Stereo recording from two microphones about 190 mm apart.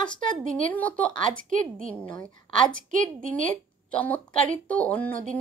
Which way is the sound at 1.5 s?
45° right (ahead or behind).